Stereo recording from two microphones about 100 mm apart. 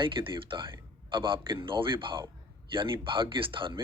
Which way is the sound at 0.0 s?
60° right (ahead or behind).